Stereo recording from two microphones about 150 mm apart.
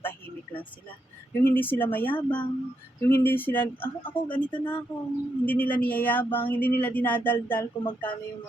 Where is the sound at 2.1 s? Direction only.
30° left (ahead or behind).